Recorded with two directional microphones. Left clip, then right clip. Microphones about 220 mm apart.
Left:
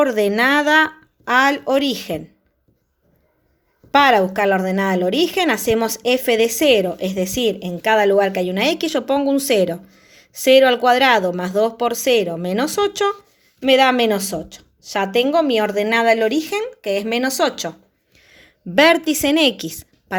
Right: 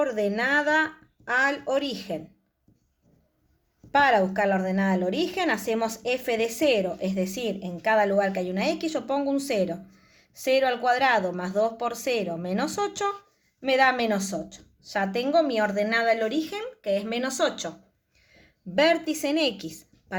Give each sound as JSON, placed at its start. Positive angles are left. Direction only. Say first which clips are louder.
{"t": 0.0, "sound": "a woman's voice", "louder": "left 9 dB", "side_deg": 35}
{"t": 3.9, "sound": "a woman's voice", "louder": "left 7 dB", "side_deg": 30}